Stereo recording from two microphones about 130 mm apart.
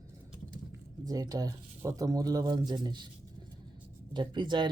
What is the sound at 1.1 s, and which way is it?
Speech, 30° right (ahead or behind).